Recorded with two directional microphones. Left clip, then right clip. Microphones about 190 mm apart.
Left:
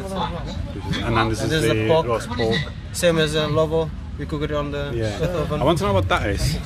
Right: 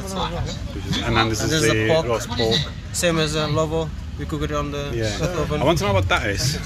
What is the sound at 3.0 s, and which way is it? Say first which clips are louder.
Speech: left 2 dB; 40° left (ahead or behind).